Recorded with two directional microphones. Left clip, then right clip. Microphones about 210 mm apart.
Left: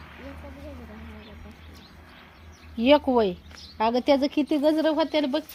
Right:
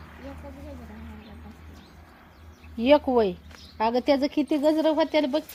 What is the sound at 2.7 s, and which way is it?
Speech, 25° left (ahead or behind).